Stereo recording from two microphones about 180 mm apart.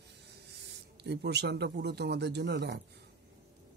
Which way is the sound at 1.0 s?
65° right (ahead or behind).